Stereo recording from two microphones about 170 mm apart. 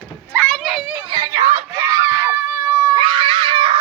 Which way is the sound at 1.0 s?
25° right (ahead or behind).